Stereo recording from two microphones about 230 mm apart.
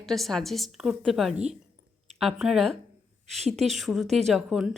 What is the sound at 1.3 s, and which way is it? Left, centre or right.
Speech, right.